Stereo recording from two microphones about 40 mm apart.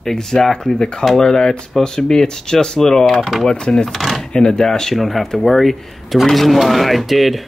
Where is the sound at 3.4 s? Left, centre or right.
Centre.